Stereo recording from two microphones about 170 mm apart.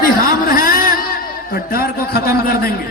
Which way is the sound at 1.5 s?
65° left (ahead or behind).